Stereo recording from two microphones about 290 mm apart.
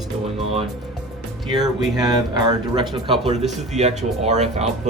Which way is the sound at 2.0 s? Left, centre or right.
Centre.